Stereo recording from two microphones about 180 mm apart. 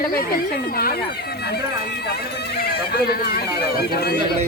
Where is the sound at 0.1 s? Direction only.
55° left (ahead or behind).